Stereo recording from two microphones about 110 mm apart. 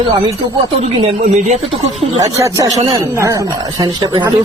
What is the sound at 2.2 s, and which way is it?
Speech, 30° right (ahead or behind).